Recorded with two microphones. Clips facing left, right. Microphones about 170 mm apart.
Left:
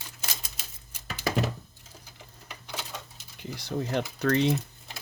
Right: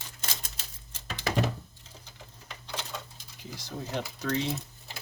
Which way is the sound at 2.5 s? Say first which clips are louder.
Even; 10° left (ahead or behind).